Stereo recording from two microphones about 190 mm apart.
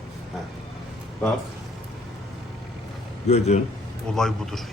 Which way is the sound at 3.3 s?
35° left (ahead or behind).